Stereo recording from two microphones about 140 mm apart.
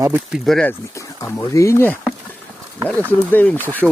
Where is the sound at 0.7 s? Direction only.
20° left (ahead or behind).